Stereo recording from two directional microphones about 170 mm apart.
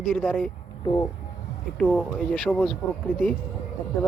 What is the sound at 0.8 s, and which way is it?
Speech, 25° left (ahead or behind).